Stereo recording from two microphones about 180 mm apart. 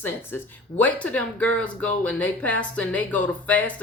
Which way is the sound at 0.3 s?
10° left (ahead or behind).